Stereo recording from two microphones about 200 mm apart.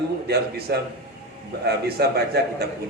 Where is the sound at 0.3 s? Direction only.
50° right (ahead or behind).